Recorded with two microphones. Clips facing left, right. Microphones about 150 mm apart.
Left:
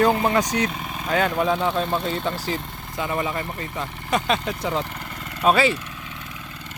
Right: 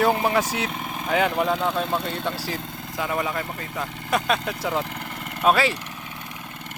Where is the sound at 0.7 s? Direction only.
50° right (ahead or behind).